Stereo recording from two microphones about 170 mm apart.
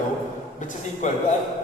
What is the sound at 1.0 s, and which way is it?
Speech, 45° left (ahead or behind).